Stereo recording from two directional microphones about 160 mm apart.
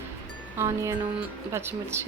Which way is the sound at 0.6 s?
20° right (ahead or behind).